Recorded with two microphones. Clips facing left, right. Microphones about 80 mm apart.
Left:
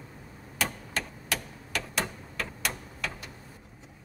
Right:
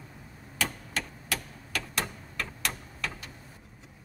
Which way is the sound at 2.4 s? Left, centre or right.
Centre.